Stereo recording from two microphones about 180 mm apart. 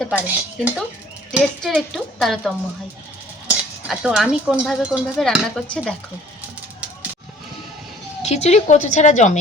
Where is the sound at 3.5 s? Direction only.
Centre (ahead or behind).